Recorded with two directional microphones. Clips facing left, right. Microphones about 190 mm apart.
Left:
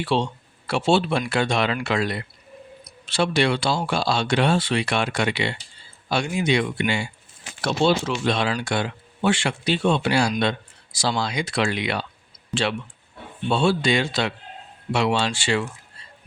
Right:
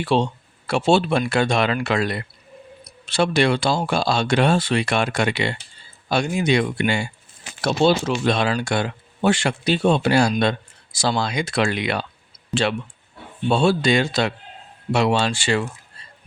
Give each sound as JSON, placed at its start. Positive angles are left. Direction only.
{"t": 0.0, "sound": "speech", "side_deg": -45}
{"t": 13.5, "sound": "speech", "side_deg": -40}